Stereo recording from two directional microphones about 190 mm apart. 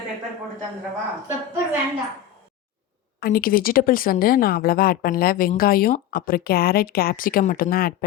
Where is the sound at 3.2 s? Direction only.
50° left (ahead or behind).